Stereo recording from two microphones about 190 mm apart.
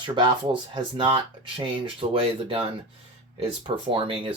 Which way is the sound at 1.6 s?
30° right (ahead or behind).